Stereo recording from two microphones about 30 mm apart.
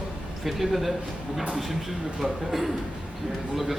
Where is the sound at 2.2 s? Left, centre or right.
Centre.